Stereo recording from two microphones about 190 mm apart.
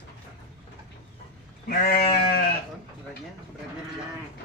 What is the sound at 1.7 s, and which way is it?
Sheep, 50° left (ahead or behind).